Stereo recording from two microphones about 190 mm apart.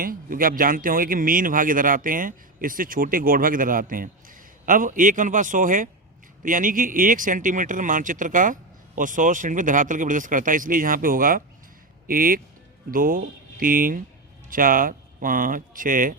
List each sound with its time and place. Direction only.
0.0 s speech: 50° right (ahead or behind)